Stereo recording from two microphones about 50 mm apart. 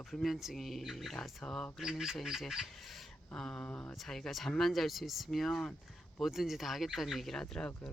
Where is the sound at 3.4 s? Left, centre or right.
Centre.